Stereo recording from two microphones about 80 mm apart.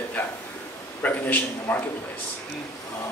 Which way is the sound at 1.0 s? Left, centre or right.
Left.